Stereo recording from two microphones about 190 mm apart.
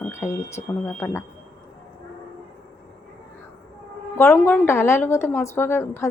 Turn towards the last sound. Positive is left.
turn(degrees=15)  # may be behind; listen again after turning